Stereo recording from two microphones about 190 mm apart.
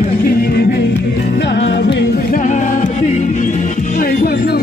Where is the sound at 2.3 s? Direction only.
40° left (ahead or behind).